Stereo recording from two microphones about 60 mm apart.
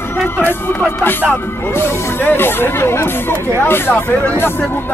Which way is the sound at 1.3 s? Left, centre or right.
Left.